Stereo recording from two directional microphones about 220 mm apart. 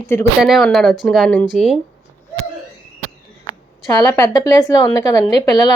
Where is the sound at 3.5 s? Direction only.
20° left (ahead or behind).